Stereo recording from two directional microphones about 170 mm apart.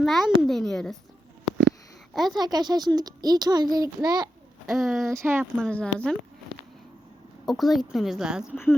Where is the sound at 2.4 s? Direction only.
25° right (ahead or behind).